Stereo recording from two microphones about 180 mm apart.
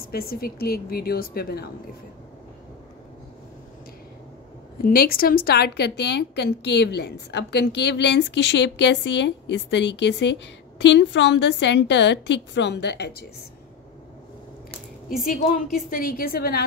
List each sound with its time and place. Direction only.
0.0 s a woman's voice: 55° left (ahead or behind)
4.8 s a woman's voice: 55° left (ahead or behind)
15.9 s a woman's voice: 55° left (ahead or behind)